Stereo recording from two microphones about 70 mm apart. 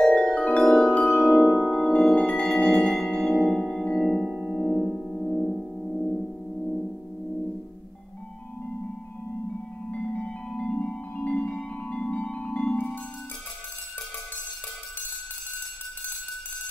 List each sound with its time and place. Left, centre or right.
0.0 s music: centre
1.3 s music: left
1.7 s music: centre
9.9 s music: centre